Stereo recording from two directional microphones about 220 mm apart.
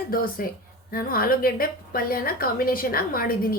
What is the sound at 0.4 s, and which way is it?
A woman's voice, 40° left (ahead or behind).